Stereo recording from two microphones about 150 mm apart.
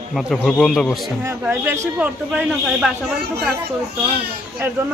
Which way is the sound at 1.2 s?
15° right (ahead or behind).